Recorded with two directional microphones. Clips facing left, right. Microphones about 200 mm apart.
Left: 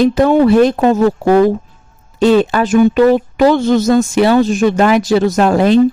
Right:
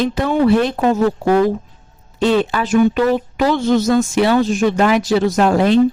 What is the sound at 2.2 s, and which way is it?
Speech, 45° left (ahead or behind).